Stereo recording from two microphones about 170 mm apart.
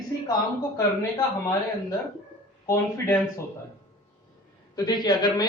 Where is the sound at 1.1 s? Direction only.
25° left (ahead or behind).